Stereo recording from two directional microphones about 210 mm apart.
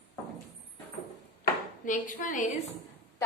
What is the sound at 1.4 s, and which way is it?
Chopping, 40° left (ahead or behind).